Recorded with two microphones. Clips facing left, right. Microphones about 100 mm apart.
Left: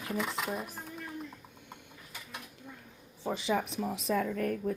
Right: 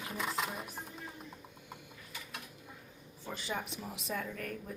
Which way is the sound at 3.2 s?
90° left.